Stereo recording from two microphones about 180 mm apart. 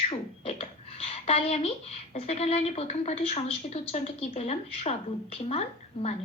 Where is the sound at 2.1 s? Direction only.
35° left (ahead or behind).